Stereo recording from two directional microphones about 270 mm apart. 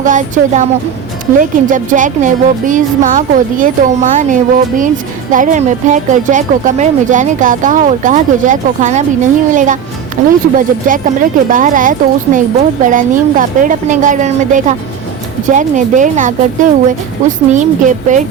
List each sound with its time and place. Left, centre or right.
0.0 s speech: right